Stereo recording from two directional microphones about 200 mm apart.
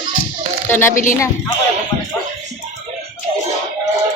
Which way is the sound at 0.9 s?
40° left (ahead or behind).